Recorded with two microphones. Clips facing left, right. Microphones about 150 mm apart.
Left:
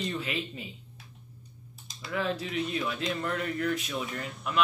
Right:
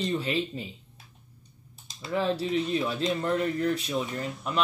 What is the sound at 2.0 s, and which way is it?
Speech, 30° right (ahead or behind).